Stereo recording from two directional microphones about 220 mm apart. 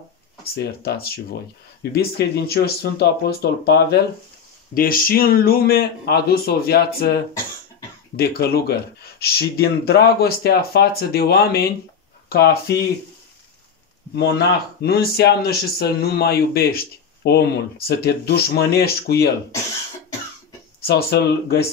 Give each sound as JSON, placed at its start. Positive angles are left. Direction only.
{"t": 0.4, "sound": "speech", "side_deg": 45}
{"t": 8.2, "sound": "speech", "side_deg": 45}
{"t": 14.8, "sound": "speech", "side_deg": 45}
{"t": 20.8, "sound": "speech", "side_deg": 45}